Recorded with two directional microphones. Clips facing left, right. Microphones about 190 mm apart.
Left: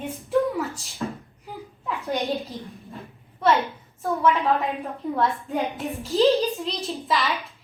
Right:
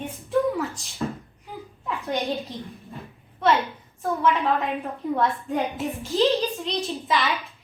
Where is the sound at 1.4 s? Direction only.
Centre (ahead or behind).